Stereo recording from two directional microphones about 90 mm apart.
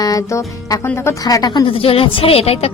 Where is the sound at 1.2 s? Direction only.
45° left (ahead or behind).